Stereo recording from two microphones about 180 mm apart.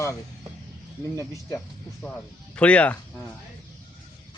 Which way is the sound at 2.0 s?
5° left (ahead or behind).